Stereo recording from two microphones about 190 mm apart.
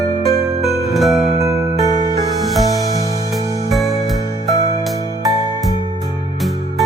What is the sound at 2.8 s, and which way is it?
Music, 15° left (ahead or behind).